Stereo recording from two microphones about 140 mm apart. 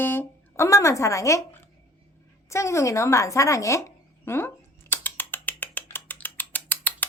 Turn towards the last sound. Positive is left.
turn(degrees=10)  # may be behind; listen again after turning